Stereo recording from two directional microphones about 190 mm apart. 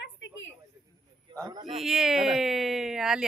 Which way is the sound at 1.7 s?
Centre (ahead or behind).